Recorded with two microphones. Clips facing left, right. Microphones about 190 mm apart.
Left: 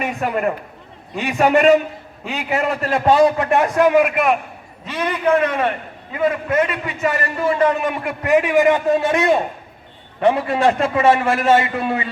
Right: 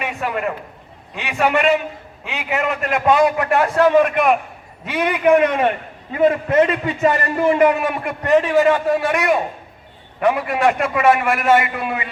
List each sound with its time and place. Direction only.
0.0 s a man's voice: 40° left (ahead or behind); by 4.4 s 5° left (ahead or behind)
4.9 s a man's voice: 10° right (ahead or behind)
6.2 s a man's voice: 25° right (ahead or behind)
7.8 s a man's voice: 5° right (ahead or behind)
8.2 s a man's voice: 10° left (ahead or behind); by 12.0 s 30° left (ahead or behind)